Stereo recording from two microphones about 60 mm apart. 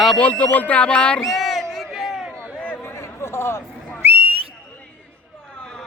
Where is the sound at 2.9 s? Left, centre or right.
Left.